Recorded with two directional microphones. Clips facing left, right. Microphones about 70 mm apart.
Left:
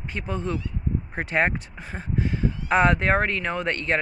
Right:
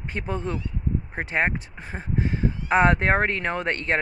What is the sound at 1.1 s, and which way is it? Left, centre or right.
Speech, centre.